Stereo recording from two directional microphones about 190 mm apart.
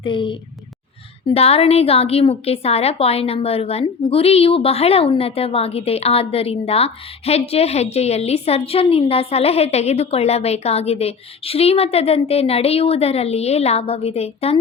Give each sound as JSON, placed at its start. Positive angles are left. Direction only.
{"t": 0.0, "sound": "a woman's voice", "side_deg": 25}